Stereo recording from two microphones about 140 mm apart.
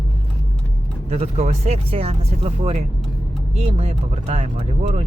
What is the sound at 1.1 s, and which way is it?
Speech, 50° right (ahead or behind).